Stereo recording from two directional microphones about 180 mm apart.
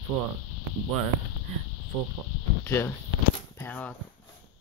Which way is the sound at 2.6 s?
15° left (ahead or behind).